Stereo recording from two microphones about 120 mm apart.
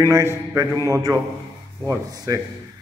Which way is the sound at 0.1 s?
25° right (ahead or behind).